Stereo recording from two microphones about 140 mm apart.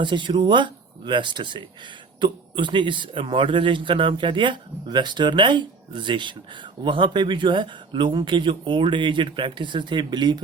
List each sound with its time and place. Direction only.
0.0 s speech: 35° right (ahead or behind)